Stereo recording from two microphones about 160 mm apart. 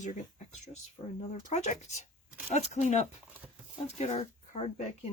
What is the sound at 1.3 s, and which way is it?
Speech, 45° left (ahead or behind).